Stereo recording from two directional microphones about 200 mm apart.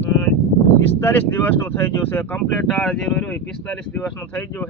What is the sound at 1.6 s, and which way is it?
Speech, 10° left (ahead or behind).